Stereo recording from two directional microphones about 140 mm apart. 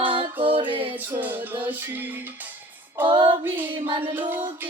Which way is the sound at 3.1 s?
35° right (ahead or behind).